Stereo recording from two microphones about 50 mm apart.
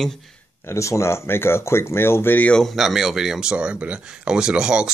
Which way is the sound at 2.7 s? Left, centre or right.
Centre.